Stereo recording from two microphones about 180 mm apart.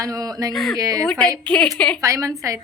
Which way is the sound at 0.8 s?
20° right (ahead or behind).